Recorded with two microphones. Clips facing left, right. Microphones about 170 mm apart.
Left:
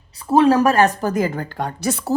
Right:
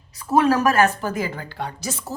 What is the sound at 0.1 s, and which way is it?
A woman's voice, 30° left (ahead or behind).